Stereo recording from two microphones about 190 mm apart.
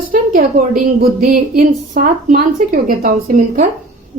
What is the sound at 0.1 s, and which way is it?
A woman's voice, 45° right (ahead or behind).